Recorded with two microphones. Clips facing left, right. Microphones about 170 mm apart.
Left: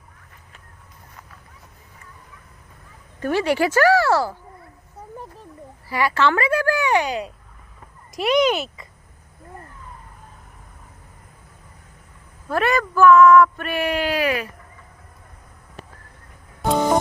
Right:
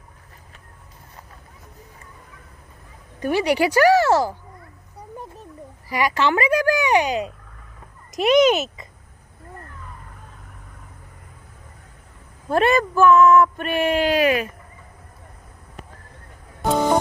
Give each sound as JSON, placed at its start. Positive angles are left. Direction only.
{"t": 3.2, "sound": "a woman's voice", "side_deg": -15}
{"t": 5.1, "sound": "a sound", "side_deg": -20}
{"t": 5.9, "sound": "a woman's voice", "side_deg": -15}
{"t": 12.5, "sound": "speech", "side_deg": -25}
{"t": 16.6, "sound": "music", "side_deg": 0}